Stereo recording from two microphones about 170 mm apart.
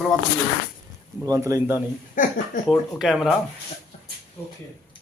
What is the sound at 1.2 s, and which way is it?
Speech, 20° right (ahead or behind).